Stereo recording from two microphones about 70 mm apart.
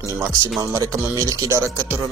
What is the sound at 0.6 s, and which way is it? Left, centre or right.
Speech, right.